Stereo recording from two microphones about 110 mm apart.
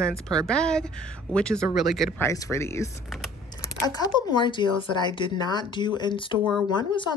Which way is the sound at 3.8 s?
35° left (ahead or behind).